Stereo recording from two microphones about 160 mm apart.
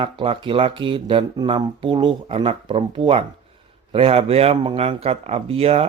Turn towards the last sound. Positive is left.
turn(degrees=-40)  # may be behind; listen again after turning